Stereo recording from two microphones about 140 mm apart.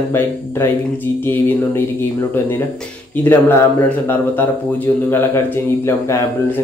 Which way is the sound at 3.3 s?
15° left (ahead or behind).